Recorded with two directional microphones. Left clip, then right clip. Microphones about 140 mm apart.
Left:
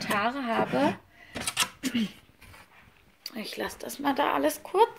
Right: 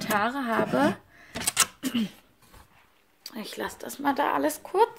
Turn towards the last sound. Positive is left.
turn(degrees=-10)  # may be behind; listen again after turning